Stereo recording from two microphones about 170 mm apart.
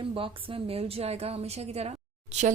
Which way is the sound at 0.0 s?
30° right (ahead or behind).